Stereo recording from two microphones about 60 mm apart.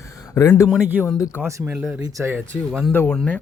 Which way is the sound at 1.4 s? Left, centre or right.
Right.